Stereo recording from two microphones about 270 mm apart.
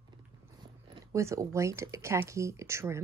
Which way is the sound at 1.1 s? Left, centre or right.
Centre.